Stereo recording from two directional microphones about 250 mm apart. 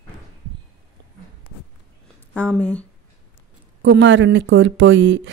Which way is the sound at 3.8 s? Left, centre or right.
Right.